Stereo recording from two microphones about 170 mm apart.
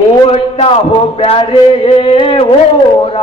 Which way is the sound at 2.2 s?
30° left (ahead or behind).